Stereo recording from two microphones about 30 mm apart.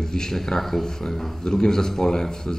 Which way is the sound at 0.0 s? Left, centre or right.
Centre.